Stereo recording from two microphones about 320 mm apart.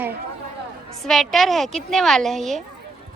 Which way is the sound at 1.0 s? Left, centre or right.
Centre.